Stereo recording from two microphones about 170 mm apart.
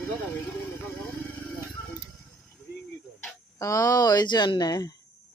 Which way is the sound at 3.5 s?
20° left (ahead or behind).